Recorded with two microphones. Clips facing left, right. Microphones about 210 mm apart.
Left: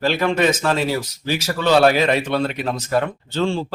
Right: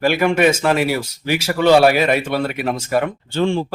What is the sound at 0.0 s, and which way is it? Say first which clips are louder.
Speech: right 3 dB; 10° right (ahead or behind).